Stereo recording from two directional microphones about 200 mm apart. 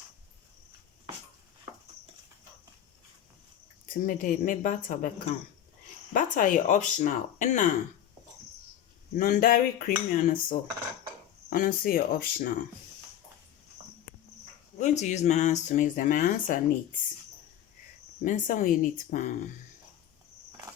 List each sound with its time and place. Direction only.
4.0 s dishes: 45° left (ahead or behind)
6.1 s speech: 40° left (ahead or behind)
9.1 s dishes: 45° left (ahead or behind)
14.8 s speech: 35° left (ahead or behind)
18.2 s speech: 40° left (ahead or behind)